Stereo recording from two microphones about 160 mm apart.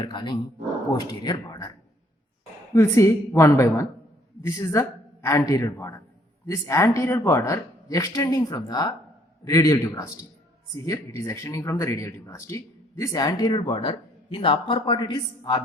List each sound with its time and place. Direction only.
0.0 s speech: 25° left (ahead or behind)
2.7 s a woman's voice: 15° left (ahead or behind)